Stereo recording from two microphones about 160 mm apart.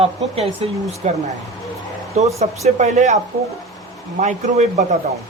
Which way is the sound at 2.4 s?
45° right (ahead or behind).